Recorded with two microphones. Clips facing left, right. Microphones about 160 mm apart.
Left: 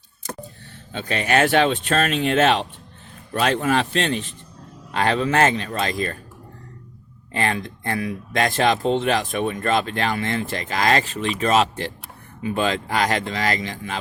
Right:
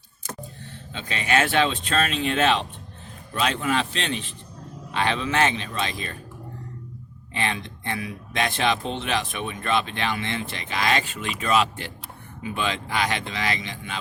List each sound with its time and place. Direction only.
0.9 s speech: 45° left (ahead or behind)
7.3 s speech: 45° left (ahead or behind)